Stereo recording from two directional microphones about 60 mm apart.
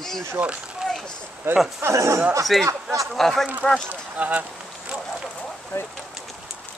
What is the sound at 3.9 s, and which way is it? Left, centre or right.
Speech, right.